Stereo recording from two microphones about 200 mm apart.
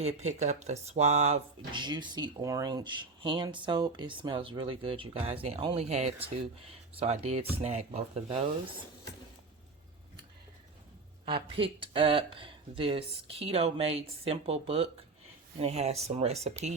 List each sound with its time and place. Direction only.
0.0 s speech: 35° right (ahead or behind)
11.3 s speech: 25° right (ahead or behind)